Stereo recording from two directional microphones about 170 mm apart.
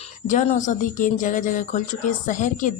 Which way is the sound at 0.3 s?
45° left (ahead or behind).